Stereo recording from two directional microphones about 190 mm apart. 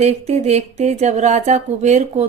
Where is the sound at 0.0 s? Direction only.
35° right (ahead or behind).